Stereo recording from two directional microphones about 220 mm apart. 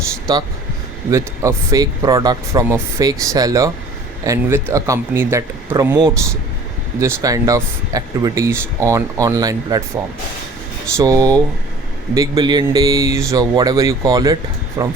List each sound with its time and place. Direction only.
0.3 s speech: 15° right (ahead or behind)
10.9 s speech: 15° right (ahead or behind)